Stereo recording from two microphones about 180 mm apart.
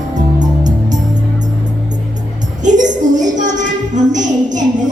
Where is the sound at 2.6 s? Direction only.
45° right (ahead or behind).